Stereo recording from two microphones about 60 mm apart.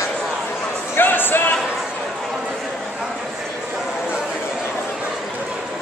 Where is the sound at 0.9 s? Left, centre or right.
Left.